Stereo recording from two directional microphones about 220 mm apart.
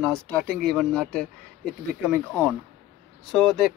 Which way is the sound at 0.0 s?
Centre (ahead or behind).